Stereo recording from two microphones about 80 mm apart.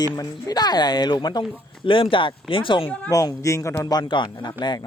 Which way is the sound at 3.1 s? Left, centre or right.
Left.